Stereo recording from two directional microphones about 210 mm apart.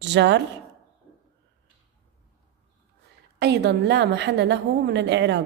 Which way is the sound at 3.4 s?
55° right (ahead or behind).